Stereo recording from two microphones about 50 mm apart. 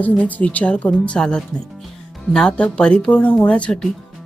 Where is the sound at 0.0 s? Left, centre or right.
Left.